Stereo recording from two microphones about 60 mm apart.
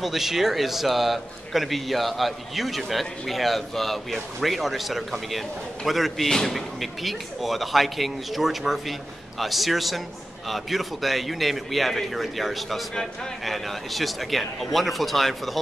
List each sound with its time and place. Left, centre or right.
0.0 s a man's voice: centre
12.9 s a man's voice: centre